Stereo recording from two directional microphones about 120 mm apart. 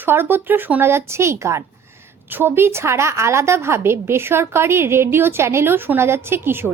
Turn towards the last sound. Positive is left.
turn(degrees=-20)  # may be behind; listen again after turning